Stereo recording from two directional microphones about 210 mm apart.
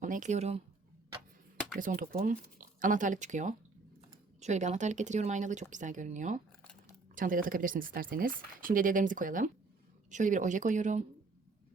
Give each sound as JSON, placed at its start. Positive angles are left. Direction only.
{"t": 0.0, "sound": "speech", "side_deg": -35}
{"t": 1.8, "sound": "speech", "side_deg": -40}